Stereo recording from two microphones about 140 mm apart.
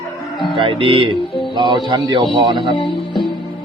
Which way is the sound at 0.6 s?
35° right (ahead or behind).